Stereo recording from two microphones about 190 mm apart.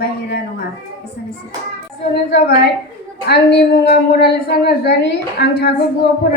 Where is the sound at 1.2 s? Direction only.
65° left (ahead or behind).